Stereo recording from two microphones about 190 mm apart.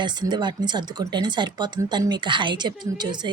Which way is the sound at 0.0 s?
20° right (ahead or behind).